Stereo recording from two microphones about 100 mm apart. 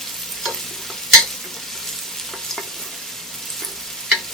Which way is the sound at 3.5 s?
Centre (ahead or behind).